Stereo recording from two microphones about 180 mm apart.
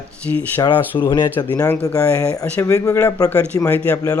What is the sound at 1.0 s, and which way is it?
Speech, 25° left (ahead or behind).